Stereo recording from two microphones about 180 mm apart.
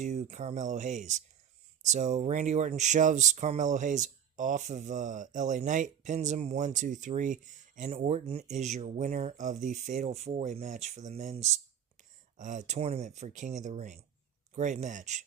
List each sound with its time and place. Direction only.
0.0 s speech: 40° right (ahead or behind)